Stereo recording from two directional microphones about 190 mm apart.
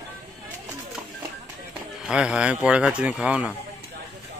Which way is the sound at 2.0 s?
5° right (ahead or behind).